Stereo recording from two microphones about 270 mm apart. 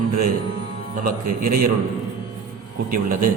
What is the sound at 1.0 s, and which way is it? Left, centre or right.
Speech, right.